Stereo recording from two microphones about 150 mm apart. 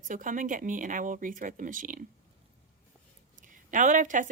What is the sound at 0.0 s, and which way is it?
Speech, 60° right (ahead or behind).